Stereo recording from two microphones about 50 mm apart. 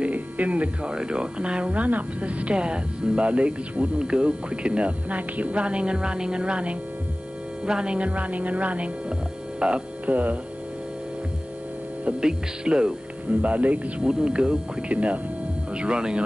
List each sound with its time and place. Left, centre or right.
0.0 s hum: right
0.9 s a woman's voice: centre
9.6 s music: right
12.2 s speech: centre
13.3 s a woman's voice: right
14.0 s a woman's voice: centre